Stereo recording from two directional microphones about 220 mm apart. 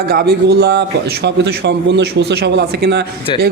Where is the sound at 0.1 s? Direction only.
45° right (ahead or behind).